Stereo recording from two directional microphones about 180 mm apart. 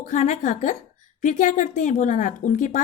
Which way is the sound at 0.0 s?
45° left (ahead or behind).